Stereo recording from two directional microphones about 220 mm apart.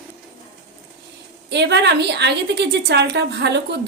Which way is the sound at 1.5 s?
50° right (ahead or behind).